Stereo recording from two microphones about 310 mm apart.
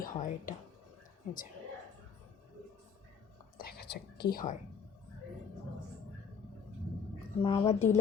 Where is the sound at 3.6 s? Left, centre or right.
Left.